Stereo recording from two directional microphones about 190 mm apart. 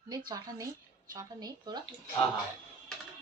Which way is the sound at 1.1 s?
20° right (ahead or behind).